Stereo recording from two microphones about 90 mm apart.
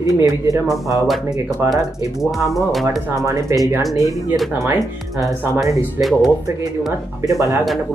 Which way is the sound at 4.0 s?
35° right (ahead or behind).